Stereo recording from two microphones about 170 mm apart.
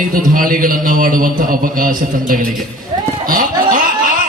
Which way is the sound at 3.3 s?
55° right (ahead or behind).